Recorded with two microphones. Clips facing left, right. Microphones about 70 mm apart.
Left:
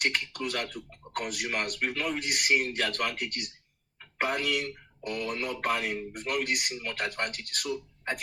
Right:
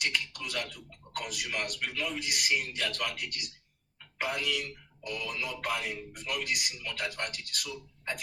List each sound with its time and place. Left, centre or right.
0.0 s speech: left